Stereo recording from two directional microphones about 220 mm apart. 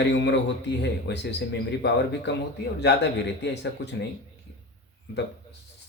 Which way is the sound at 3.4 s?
50° left (ahead or behind).